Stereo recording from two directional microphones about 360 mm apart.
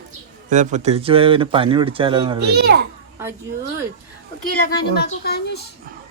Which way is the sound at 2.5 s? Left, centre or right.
Right.